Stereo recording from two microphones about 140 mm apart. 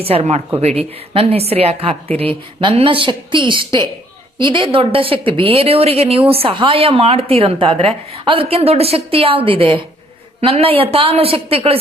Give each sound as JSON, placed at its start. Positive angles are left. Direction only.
{"t": 0.0, "sound": "a woman's voice", "side_deg": -45}